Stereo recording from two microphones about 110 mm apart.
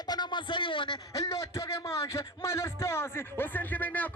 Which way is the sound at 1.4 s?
25° left (ahead or behind).